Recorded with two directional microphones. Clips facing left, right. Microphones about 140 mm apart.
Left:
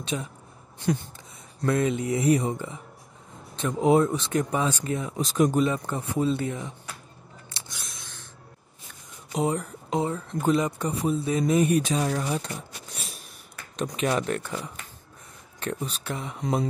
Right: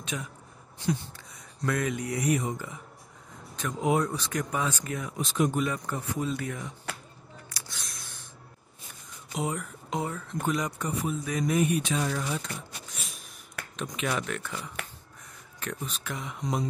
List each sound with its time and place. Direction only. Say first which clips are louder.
0.0 s speech: left 5 dB; 30° left (ahead or behind)
1.7 s speech: left 5 dB; 25° left (ahead or behind)
5.2 s speech: left 4 dB; 40° left (ahead or behind)
5.6 s speech: left 5 dB; 25° left (ahead or behind)
7.4 s a sound: left 2 dB; 25° left (ahead or behind)
7.8 s a sound: left 1 dB; centre (ahead or behind)
9.3 s speech: left 6 dB; 30° left (ahead or behind)
11.6 s speech: left 4 dB; 40° left (ahead or behind)
13.6 s a sound: right 4 dB; 70° right (ahead or behind)
13.9 s speech: left 5 dB; 35° left (ahead or behind)
14.4 s speech: left 3 dB; 25° left (ahead or behind)